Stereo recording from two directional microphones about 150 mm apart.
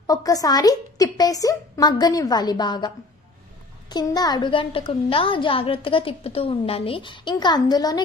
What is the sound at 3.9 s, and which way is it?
A woman's voice, 25° left (ahead or behind).